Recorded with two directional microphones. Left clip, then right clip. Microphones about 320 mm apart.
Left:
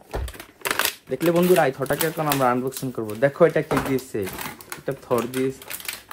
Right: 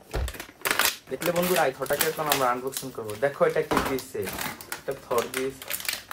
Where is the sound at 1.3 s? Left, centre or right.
Left.